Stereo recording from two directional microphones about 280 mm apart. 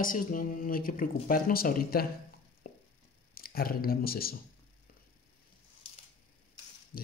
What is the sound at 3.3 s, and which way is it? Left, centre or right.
Speech, left.